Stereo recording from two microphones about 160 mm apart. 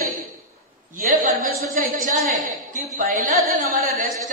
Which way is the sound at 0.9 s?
55° right (ahead or behind).